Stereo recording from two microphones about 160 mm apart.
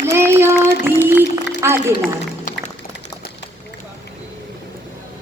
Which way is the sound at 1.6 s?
15° right (ahead or behind).